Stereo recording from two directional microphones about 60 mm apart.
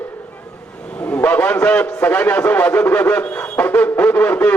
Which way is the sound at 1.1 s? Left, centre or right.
Left.